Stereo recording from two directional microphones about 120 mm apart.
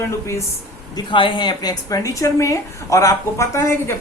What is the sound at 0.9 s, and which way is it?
Speech, 45° left (ahead or behind).